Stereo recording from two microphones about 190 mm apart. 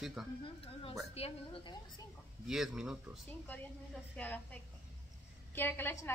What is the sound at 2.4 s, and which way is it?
Speech, centre (ahead or behind).